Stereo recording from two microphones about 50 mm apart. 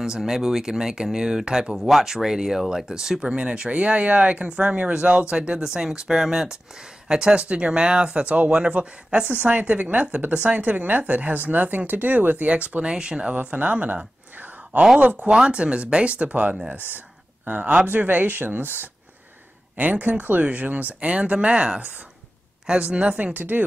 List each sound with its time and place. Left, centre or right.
0.0 s speech: centre; by 12.8 s right
12.8 s speech: centre
13.3 s speech: right
15.4 s speech: right
22.8 s speech: right
23.3 s speech: right